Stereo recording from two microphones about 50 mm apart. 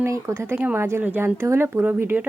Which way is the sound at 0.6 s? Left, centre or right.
Right.